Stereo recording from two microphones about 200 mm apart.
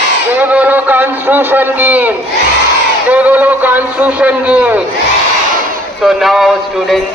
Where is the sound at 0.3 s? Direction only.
10° right (ahead or behind).